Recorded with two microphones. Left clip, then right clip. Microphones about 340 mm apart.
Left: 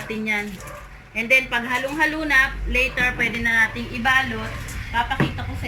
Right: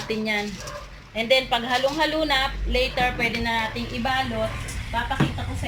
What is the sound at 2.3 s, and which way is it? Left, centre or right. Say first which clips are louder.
Speech: left 5 dB; centre.